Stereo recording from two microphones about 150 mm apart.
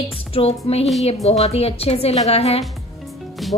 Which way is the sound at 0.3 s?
40° left (ahead or behind).